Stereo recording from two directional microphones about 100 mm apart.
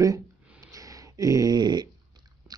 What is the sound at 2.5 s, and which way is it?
Biting, 40° right (ahead or behind).